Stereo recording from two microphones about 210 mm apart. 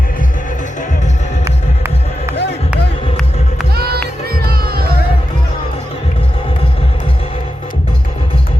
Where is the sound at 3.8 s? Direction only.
45° right (ahead or behind).